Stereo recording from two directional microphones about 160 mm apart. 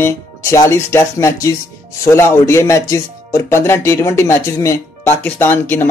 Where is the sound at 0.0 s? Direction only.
20° left (ahead or behind).